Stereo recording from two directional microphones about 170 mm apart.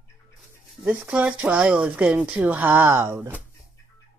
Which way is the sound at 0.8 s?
5° right (ahead or behind).